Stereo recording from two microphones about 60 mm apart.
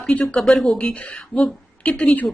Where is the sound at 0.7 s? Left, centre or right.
Centre.